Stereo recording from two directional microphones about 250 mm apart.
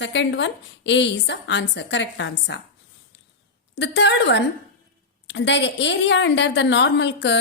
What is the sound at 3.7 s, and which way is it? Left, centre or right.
A woman's voice, left.